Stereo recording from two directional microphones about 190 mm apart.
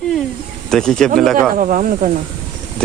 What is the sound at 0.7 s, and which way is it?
Speech, 5° left (ahead or behind).